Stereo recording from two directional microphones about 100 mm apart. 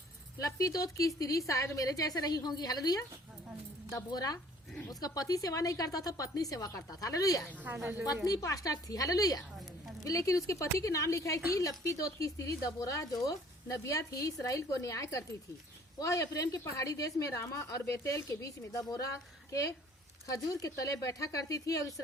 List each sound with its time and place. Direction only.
0.3 s a woman's voice: 35° left (ahead or behind)